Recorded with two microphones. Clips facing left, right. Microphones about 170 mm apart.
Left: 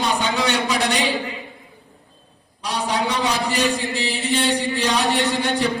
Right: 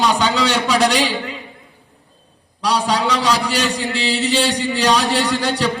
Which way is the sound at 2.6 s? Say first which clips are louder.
Right 5 dB; 90° right.